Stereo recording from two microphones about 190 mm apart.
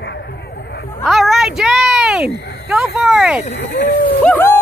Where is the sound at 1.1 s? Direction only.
Centre (ahead or behind).